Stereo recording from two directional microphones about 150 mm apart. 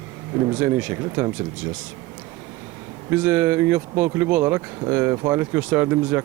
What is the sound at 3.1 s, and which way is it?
Speech, 10° right (ahead or behind).